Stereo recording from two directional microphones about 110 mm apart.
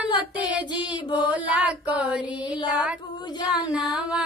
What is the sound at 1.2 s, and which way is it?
Music, 10° right (ahead or behind).